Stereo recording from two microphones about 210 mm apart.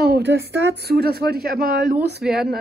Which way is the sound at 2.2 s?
5° right (ahead or behind).